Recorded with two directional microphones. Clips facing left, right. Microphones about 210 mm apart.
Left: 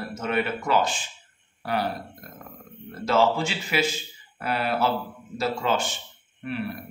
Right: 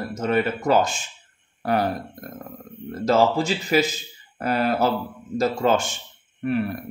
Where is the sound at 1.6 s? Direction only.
45° right (ahead or behind).